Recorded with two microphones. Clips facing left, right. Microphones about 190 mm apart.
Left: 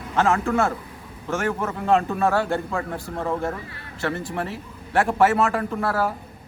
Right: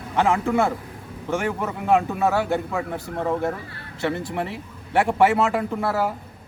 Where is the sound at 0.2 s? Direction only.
15° right (ahead or behind).